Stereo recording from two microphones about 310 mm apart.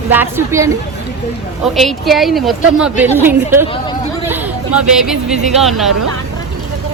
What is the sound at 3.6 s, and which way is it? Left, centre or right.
Speech, centre.